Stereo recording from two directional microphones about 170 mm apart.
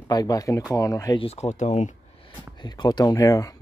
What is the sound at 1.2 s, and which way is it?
Speech, 35° left (ahead or behind).